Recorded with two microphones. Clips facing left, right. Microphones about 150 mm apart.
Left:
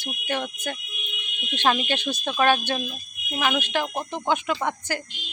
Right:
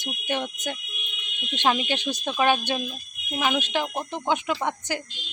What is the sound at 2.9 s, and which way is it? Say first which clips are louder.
Fire alarm: even; 10° left (ahead or behind).